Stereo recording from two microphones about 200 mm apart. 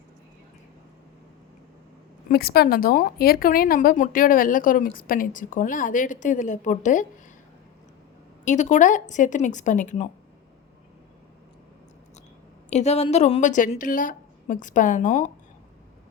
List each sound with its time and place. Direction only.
2.3 s speech: 50° left (ahead or behind)
8.4 s a woman's voice: 35° left (ahead or behind)
12.7 s a woman's voice: 35° left (ahead or behind)